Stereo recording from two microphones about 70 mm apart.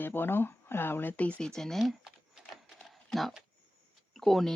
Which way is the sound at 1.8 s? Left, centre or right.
Centre.